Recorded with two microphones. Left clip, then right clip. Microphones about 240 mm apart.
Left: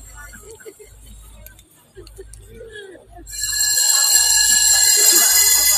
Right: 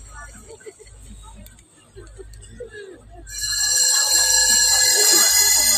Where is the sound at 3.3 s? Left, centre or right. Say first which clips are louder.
Left 1 dB; right.